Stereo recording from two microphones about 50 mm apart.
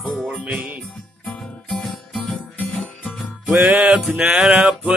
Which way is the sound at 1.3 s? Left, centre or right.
Centre.